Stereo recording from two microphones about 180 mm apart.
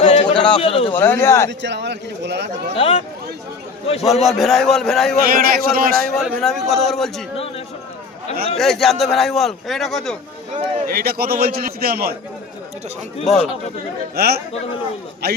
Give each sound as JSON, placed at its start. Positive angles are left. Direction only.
{"t": 0.0, "sound": "a sound", "side_deg": 35}
{"t": 0.3, "sound": "a sound", "side_deg": 5}
{"t": 0.6, "sound": "speech", "side_deg": 30}
{"t": 0.9, "sound": "speech", "side_deg": 10}
{"t": 1.5, "sound": "speech", "side_deg": -75}
{"t": 2.7, "sound": "speech", "side_deg": 30}
{"t": 4.0, "sound": "a man's voice", "side_deg": 0}
{"t": 5.2, "sound": "a man's voice", "side_deg": -55}
{"t": 6.1, "sound": "a man's voice", "side_deg": 0}
{"t": 8.5, "sound": "a man's voice", "side_deg": 0}
{"t": 10.8, "sound": "a man's voice", "side_deg": -60}
{"t": 13.3, "sound": "a man's voice", "side_deg": 0}
{"t": 14.2, "sound": "a man's voice", "side_deg": -60}